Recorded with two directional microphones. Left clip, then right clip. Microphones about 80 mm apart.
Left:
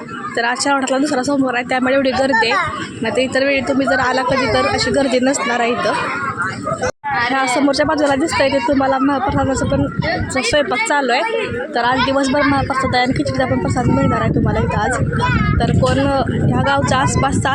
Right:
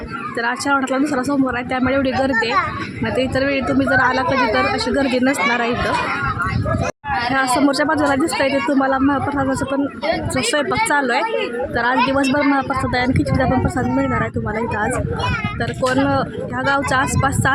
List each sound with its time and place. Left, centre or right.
0.4 s speech: centre
7.2 s a woman's voice: centre
15.6 s speech: right